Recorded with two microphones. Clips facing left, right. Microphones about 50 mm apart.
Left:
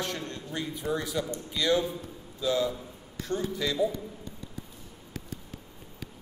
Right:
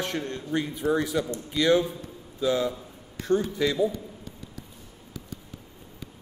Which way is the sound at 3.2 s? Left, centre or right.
Right.